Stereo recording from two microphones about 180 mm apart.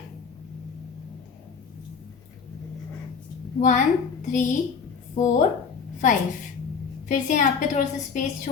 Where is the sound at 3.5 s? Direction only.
45° left (ahead or behind).